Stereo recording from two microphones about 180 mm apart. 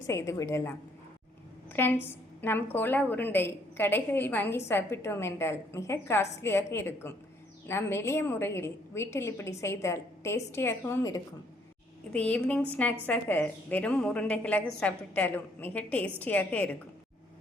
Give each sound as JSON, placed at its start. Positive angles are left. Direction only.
{"t": 0.1, "sound": "a woman's voice", "side_deg": 15}